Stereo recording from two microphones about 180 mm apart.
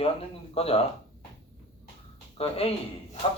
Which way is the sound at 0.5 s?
35° left (ahead or behind).